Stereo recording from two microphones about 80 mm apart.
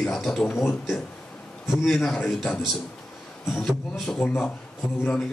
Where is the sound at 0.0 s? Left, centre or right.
Centre.